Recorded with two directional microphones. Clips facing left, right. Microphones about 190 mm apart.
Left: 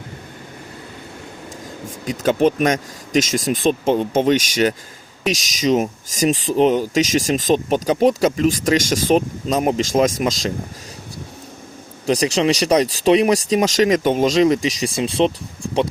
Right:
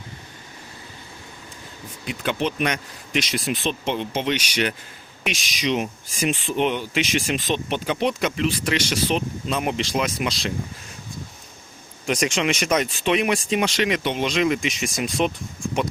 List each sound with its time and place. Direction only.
2.0 s speech: 45° left (ahead or behind)
12.0 s speech: 35° left (ahead or behind)